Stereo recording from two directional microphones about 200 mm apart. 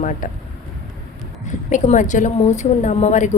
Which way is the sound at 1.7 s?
40° left (ahead or behind).